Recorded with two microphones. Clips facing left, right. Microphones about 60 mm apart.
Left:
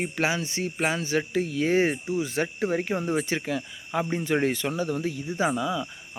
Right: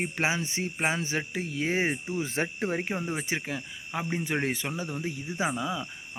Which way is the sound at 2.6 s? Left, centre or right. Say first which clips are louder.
Left 4 dB; centre.